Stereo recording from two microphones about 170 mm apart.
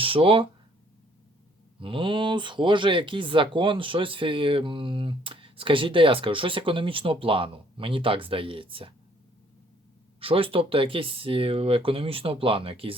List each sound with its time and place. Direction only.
0.0 s speech: 30° right (ahead or behind)
1.8 s speech: 30° right (ahead or behind)
10.2 s speech: 30° right (ahead or behind)